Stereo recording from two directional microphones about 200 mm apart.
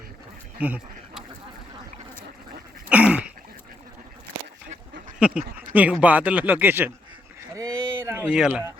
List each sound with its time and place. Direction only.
0.6 s speech: 5° right (ahead or behind)
2.9 s throat clearing: 5° right (ahead or behind)
4.7 s duck: 40° right (ahead or behind)
5.2 s speech: 5° right (ahead or behind)
7.5 s a sound: 15° right (ahead or behind)